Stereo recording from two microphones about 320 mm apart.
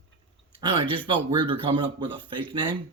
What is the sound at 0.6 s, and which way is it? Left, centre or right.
A man's voice, centre.